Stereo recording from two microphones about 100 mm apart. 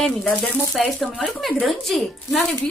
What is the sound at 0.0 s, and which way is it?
Speech, 5° left (ahead or behind).